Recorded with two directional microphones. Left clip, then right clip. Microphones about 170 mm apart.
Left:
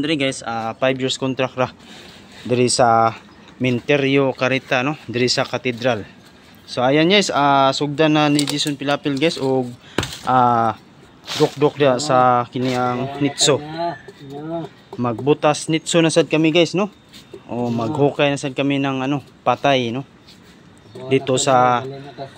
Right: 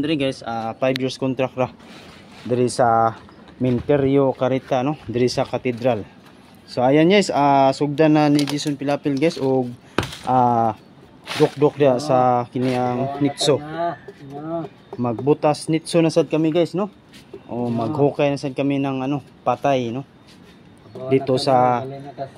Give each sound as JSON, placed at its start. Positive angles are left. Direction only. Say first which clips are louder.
{"t": 0.0, "sound": "speech", "louder": "left 2 dB", "side_deg": -5}
{"t": 2.4, "sound": "speech", "louder": "left 3 dB", "side_deg": 10}
{"t": 3.8, "sound": "speech", "louder": "even", "side_deg": -10}
{"t": 15.0, "sound": "speech", "louder": "left 1 dB", "side_deg": 0}
{"t": 21.0, "sound": "speech", "louder": "left 1 dB", "side_deg": -5}